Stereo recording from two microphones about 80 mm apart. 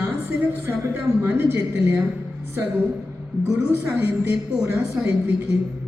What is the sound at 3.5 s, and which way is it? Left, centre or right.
A woman's voice, right.